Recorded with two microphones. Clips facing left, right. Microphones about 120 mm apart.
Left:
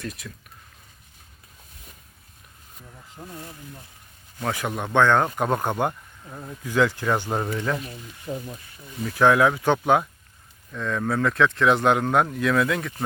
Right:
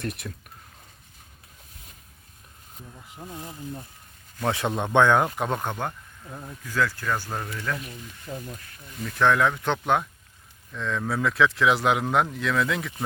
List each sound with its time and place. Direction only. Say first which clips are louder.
0.0 s speech: right 2 dB; 60° right (ahead or behind)
3.2 s speech: right 1 dB; 15° right (ahead or behind)
5.4 s speech: left 4 dB; centre (ahead or behind)
5.6 s speech: left 6 dB; 15° left (ahead or behind)
6.2 s speech: left 2 dB; centre (ahead or behind)
6.7 s speech: left 5 dB; 20° left (ahead or behind)
8.3 s speech: left 4 dB; 10° left (ahead or behind)